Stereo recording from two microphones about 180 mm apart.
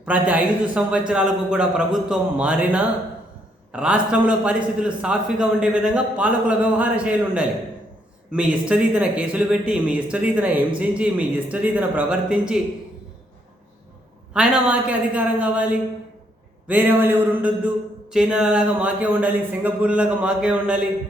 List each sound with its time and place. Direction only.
0.0 s a man's voice: 10° right (ahead or behind)
14.3 s speech: 5° right (ahead or behind)